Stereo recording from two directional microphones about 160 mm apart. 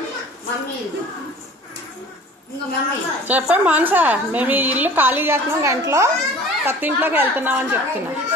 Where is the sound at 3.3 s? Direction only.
10° right (ahead or behind).